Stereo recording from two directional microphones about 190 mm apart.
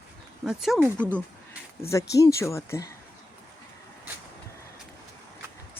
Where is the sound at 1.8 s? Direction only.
15° left (ahead or behind).